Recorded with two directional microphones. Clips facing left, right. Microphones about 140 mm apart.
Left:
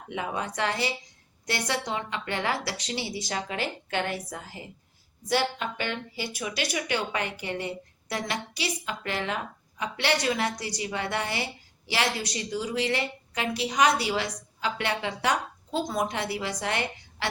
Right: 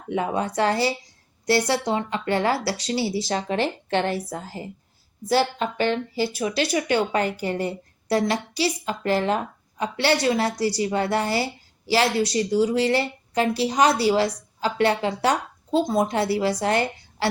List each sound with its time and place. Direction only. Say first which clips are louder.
0.1 s speech: right 7 dB; 35° right (ahead or behind)